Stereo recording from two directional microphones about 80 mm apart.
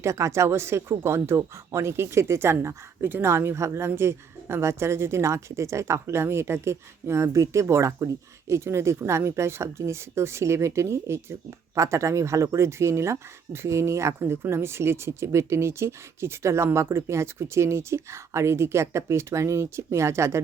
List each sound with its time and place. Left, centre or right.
0.0 s speech: right